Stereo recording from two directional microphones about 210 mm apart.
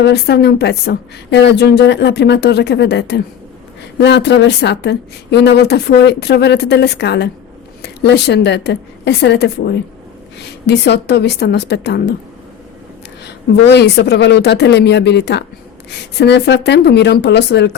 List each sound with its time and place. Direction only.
0.0 s a woman's voice: 50° left (ahead or behind)
13.7 s a woman's voice: 55° left (ahead or behind)